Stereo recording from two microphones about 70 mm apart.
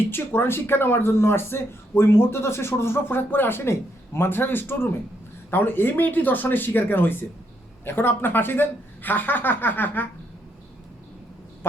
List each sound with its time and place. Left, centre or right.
0.3 s a man's voice: left